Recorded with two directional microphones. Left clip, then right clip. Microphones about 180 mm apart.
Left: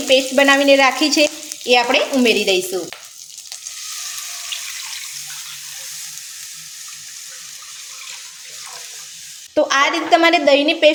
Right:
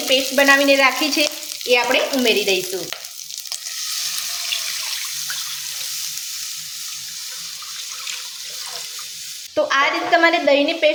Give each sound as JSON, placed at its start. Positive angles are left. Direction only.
{"t": 0.1, "sound": "a woman's voice", "side_deg": 40}
{"t": 1.6, "sound": "frying", "side_deg": 55}
{"t": 9.6, "sound": "a woman's voice", "side_deg": 50}